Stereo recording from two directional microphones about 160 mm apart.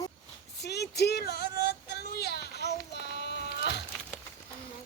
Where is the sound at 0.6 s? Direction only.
90° left.